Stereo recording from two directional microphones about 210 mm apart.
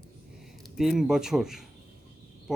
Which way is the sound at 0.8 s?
Centre (ahead or behind).